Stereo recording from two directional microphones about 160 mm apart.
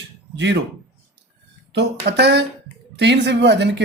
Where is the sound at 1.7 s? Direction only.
90° right.